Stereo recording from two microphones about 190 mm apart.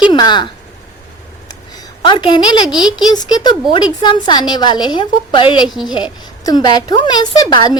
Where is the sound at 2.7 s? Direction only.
5° right (ahead or behind).